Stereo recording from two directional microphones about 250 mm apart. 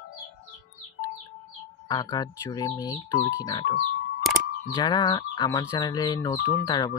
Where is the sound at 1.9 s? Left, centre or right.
Centre.